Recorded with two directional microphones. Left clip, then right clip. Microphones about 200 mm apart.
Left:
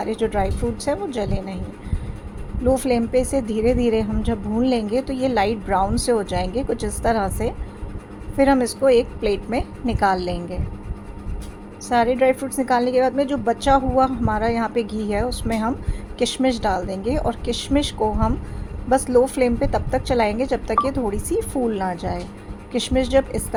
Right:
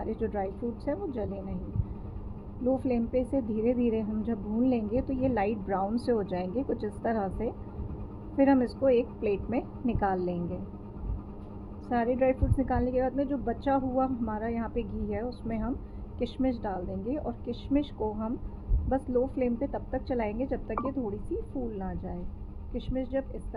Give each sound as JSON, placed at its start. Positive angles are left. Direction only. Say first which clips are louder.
{"t": 0.0, "sound": "a woman's voice", "louder": "left 10 dB", "side_deg": 20}
{"t": 2.6, "sound": "a woman's voice", "louder": "left 10 dB", "side_deg": 20}
{"t": 11.9, "sound": "a woman's voice", "louder": "left 10 dB", "side_deg": 25}